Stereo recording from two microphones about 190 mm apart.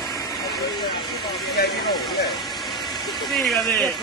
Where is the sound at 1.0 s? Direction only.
Centre (ahead or behind).